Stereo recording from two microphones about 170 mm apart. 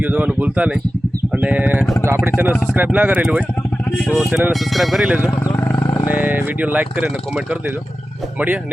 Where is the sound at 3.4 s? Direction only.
5° left (ahead or behind).